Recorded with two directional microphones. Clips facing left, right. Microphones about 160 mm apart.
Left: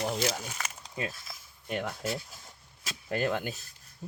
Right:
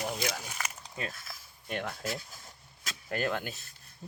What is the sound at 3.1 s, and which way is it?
Speech, 20° left (ahead or behind).